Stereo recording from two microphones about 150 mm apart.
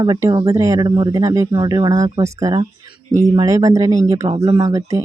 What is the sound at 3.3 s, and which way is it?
Speech, 20° right (ahead or behind).